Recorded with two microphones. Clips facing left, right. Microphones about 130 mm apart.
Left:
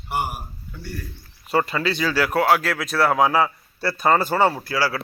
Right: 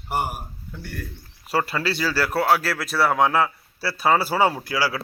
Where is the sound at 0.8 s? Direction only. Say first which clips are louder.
Left 1 dB; 60° right (ahead or behind).